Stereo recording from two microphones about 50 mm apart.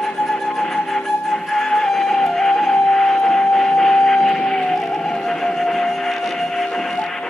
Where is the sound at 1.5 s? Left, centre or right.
Centre.